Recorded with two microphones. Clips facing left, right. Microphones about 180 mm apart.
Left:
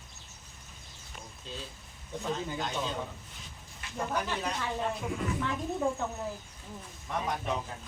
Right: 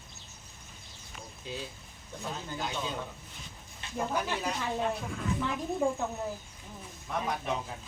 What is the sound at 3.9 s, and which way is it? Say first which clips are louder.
Speech: right 1 dB; 5° right (ahead or behind).